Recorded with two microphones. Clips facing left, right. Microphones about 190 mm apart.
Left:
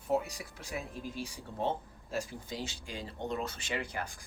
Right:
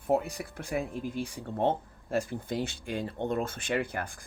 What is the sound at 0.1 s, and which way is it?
Speech, 55° right (ahead or behind).